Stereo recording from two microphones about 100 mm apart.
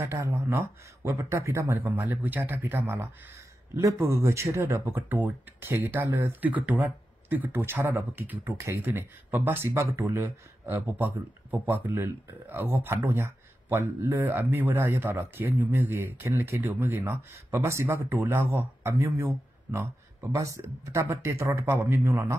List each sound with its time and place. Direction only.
0.1 s speech: 30° right (ahead or behind)
1.8 s speech: 15° right (ahead or behind)